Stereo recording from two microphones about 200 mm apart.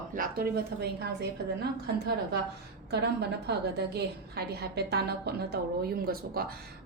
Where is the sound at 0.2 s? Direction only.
50° right (ahead or behind).